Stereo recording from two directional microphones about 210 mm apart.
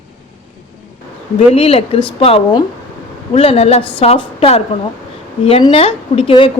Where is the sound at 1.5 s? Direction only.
25° left (ahead or behind).